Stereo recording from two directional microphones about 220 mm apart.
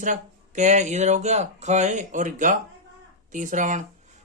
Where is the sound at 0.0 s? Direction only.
35° right (ahead or behind).